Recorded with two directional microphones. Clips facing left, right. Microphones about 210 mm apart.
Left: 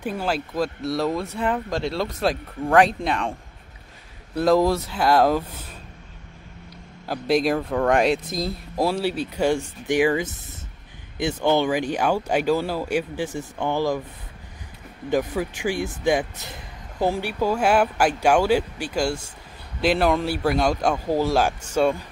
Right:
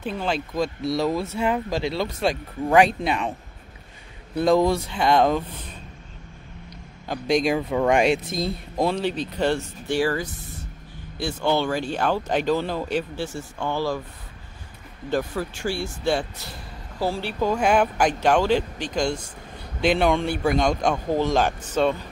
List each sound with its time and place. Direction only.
0.0 s a man's voice: 10° left (ahead or behind)
4.4 s a man's voice: centre (ahead or behind)
7.1 s a man's voice: 5° left (ahead or behind)
15.0 s a man's voice: 15° left (ahead or behind)